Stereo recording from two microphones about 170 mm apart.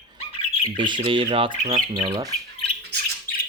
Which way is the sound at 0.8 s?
30° right (ahead or behind).